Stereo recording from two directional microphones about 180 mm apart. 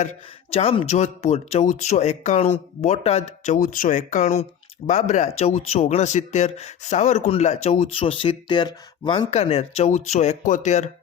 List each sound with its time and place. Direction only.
0.5 s speech: 35° left (ahead or behind)